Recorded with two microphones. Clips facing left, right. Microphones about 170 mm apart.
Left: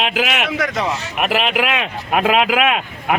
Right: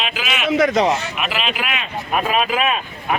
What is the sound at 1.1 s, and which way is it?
Speech, 60° left (ahead or behind).